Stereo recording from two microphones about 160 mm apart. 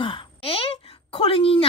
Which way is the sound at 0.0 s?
30° left (ahead or behind).